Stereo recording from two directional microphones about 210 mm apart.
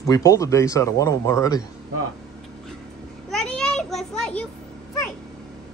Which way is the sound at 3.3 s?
Centre (ahead or behind).